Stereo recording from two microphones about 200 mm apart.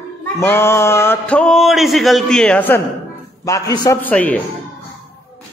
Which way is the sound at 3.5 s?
15° left (ahead or behind).